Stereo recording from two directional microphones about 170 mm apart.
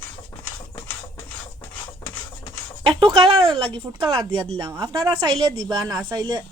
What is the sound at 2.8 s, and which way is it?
Speech, 30° right (ahead or behind).